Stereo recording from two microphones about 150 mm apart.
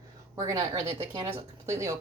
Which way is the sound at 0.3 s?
20° right (ahead or behind).